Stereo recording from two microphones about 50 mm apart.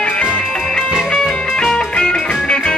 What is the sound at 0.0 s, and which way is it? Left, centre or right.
Music, left.